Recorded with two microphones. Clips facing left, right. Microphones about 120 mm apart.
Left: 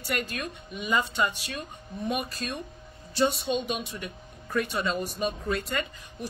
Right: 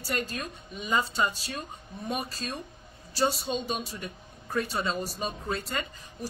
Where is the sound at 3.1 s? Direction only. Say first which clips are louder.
Left 2 dB; 35° right (ahead or behind).